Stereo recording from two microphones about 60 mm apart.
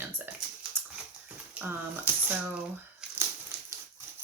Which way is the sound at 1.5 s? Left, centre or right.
Right.